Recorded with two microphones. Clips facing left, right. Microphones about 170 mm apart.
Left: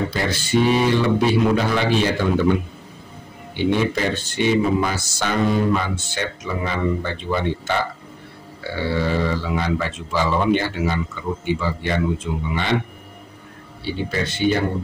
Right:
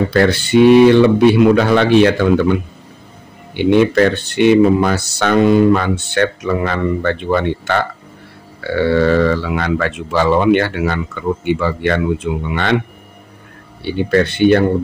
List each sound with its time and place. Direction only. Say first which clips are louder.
0.1 s speech: right 9 dB; 65° right (ahead or behind)
3.5 s speech: right 8 dB; 65° right (ahead or behind)
13.8 s speech: right 10 dB; 60° right (ahead or behind)